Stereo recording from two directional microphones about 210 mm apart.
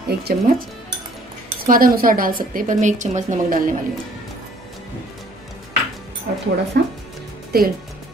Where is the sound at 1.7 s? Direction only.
45° right (ahead or behind).